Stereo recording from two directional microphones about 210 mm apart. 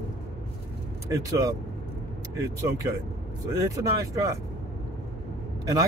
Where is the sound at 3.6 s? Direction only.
15° right (ahead or behind).